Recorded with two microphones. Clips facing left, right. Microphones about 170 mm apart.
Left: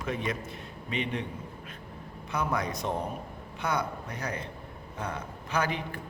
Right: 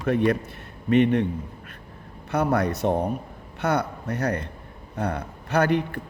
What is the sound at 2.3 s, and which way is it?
A man's voice, 60° right (ahead or behind).